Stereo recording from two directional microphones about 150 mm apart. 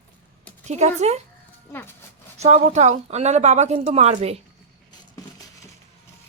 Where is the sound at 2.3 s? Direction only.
45° right (ahead or behind).